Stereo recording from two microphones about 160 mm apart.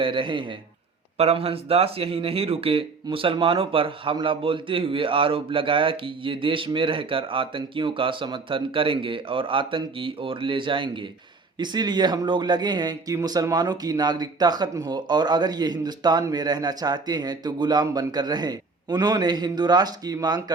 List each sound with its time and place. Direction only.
0.0 s speech: 30° right (ahead or behind)